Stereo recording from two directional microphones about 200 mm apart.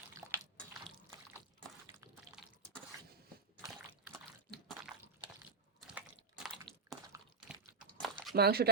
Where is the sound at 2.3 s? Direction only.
10° right (ahead or behind).